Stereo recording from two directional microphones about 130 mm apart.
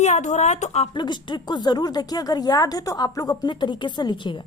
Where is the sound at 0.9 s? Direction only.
35° left (ahead or behind).